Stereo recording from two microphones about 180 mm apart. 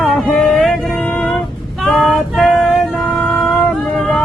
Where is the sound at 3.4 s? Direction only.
Centre (ahead or behind).